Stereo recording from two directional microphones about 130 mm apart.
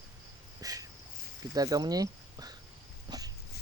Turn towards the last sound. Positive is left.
turn(degrees=-30)  # may be behind; listen again after turning